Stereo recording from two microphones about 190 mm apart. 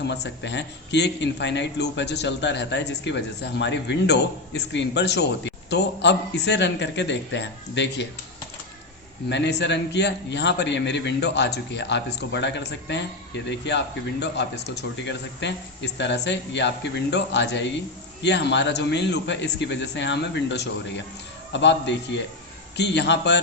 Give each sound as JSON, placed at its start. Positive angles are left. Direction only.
{"t": 0.0, "sound": "a man's voice", "side_deg": 65}
{"t": 9.3, "sound": "a man's voice", "side_deg": 65}